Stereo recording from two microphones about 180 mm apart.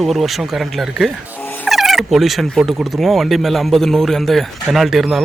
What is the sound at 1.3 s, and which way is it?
Cat, 10° left (ahead or behind).